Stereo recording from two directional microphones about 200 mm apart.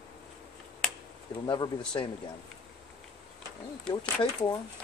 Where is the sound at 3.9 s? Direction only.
20° left (ahead or behind).